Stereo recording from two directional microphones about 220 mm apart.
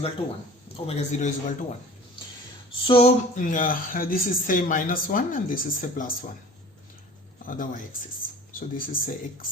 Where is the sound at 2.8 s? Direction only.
25° left (ahead or behind).